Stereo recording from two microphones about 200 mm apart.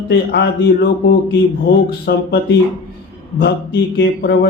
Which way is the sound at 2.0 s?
55° left (ahead or behind).